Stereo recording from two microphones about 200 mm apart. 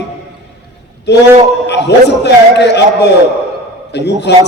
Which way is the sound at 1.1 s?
55° left (ahead or behind).